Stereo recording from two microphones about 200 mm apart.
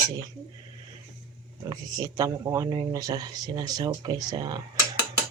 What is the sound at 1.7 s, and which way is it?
Speech, 20° right (ahead or behind).